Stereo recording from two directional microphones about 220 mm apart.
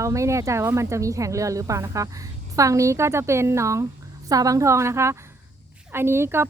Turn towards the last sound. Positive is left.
turn(degrees=-10)  # may be behind; listen again after turning